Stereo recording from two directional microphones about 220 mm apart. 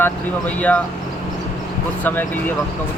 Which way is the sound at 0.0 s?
5° left (ahead or behind).